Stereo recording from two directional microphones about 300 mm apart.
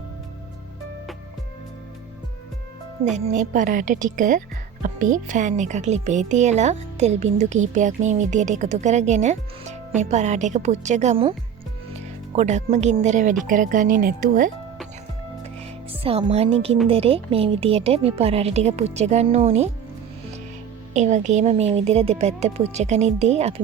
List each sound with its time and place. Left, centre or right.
3.2 s a woman's voice: right
16.0 s a woman's voice: centre
20.9 s a woman's voice: right